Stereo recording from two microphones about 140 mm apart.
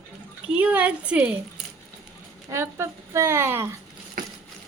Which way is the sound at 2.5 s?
20° right (ahead or behind).